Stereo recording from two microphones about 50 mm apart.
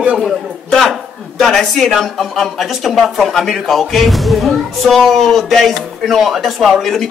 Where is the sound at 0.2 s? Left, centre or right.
Centre.